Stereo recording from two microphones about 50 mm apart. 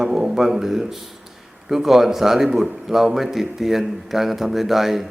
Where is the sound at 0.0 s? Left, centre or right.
Centre.